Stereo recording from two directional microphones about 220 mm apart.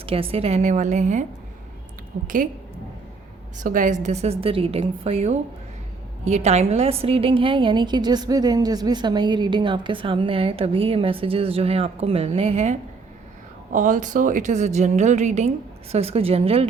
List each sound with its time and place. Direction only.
0.0 s a woman's voice: 25° right (ahead or behind)
2.2 s a woman's voice: 35° right (ahead or behind)
3.6 s a woman's voice: 35° right (ahead or behind)